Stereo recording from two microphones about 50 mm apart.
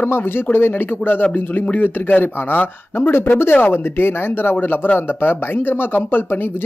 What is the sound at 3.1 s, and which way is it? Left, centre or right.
Speech, left.